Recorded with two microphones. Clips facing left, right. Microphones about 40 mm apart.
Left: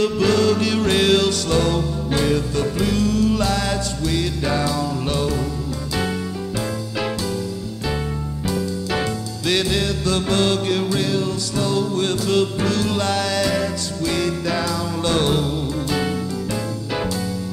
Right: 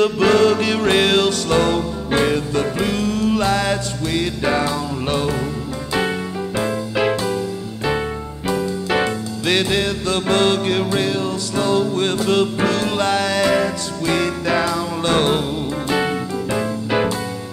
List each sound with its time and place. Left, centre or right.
0.0 s music: right
8.5 s music: right